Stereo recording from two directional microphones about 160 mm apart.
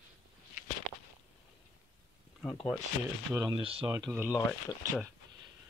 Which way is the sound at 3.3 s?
15° right (ahead or behind).